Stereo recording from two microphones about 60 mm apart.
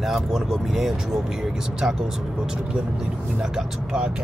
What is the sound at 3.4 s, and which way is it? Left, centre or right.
Speech, centre.